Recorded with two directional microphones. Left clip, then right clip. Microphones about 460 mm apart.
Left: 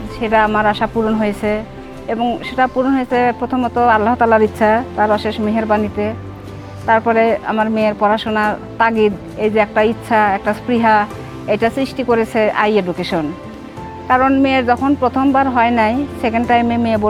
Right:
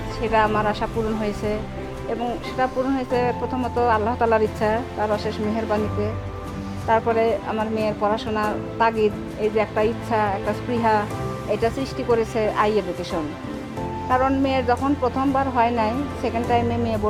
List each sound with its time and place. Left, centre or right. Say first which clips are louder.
0.2 s speech: left 6 dB; left
2.6 s speech: left 7 dB; left